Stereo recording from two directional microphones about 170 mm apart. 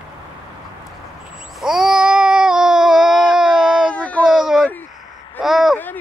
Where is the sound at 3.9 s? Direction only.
10° left (ahead or behind).